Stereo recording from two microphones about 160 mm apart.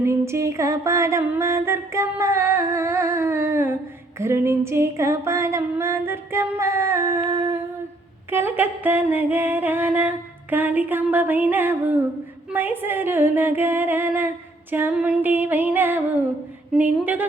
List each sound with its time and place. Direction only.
0.0 s music: 15° right (ahead or behind)